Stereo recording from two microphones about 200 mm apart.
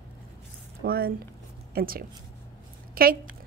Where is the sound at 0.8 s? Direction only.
50° right (ahead or behind).